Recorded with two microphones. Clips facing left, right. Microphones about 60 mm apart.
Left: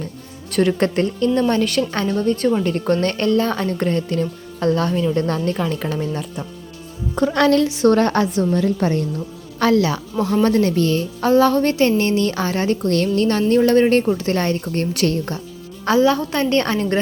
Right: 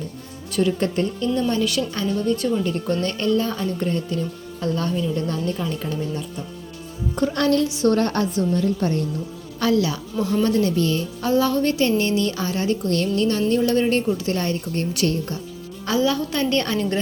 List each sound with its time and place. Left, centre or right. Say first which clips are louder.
0.5 s a woman's voice: left 4 dB; left
1.4 s a woman's voice: left 3 dB; left
7.4 s a woman's voice: left 4 dB; left
9.6 s a woman's voice: left 4 dB; left
15.9 s a woman's voice: left 5 dB; left